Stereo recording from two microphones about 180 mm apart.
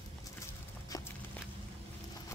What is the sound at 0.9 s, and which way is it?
Walk, 20° left (ahead or behind).